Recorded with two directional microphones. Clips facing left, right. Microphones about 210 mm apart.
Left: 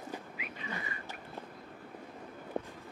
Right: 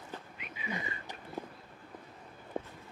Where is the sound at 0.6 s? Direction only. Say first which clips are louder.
Right 3 dB; 15° right (ahead or behind).